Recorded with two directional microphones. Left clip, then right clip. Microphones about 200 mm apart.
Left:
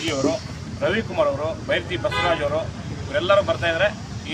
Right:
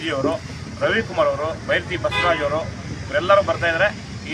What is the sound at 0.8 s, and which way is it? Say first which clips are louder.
A man's voice: right 2 dB; 5° left (ahead or behind).